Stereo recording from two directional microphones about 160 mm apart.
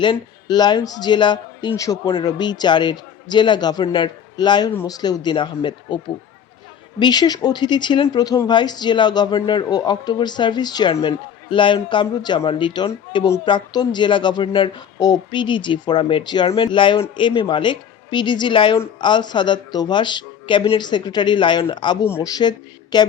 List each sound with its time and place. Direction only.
0.0 s a man's voice: 30° left (ahead or behind)
4.7 s speech: 15° left (ahead or behind)
4.9 s a man's voice: 25° left (ahead or behind)
7.0 s a man's voice: 25° left (ahead or behind)
22.0 s a man's voice: 20° left (ahead or behind)